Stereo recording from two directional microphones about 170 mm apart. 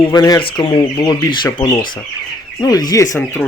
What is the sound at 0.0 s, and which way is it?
Speech, 25° left (ahead or behind).